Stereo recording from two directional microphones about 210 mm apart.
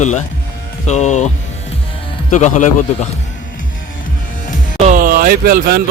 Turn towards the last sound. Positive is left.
turn(degrees=-45)  # may be behind; listen again after turning